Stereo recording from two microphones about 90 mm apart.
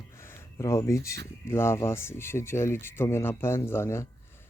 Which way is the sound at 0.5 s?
40° left (ahead or behind).